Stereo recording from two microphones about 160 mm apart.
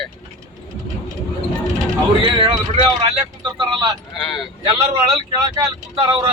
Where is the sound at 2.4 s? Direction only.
40° right (ahead or behind).